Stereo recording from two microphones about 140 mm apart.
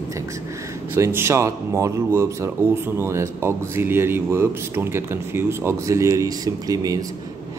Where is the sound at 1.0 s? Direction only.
20° right (ahead or behind).